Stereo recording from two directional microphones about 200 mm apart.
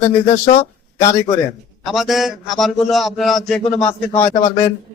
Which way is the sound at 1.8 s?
Centre (ahead or behind).